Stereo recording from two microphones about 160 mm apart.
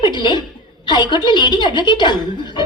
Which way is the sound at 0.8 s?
30° left (ahead or behind).